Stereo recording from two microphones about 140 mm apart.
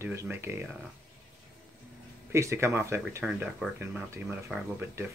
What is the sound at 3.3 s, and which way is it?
Speech, 5° right (ahead or behind).